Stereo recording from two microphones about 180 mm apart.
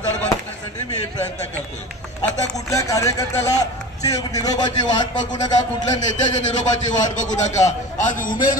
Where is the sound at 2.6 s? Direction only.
20° left (ahead or behind).